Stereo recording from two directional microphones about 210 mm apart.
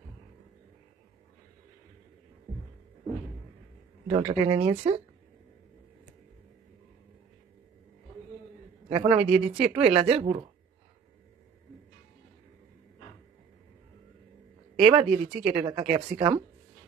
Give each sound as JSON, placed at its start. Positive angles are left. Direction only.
{"t": 4.1, "sound": "speech", "side_deg": -30}
{"t": 8.8, "sound": "a man's voice", "side_deg": -25}
{"t": 9.3, "sound": "speech", "side_deg": -5}
{"t": 9.9, "sound": "speech", "side_deg": -25}
{"t": 14.9, "sound": "speech", "side_deg": -30}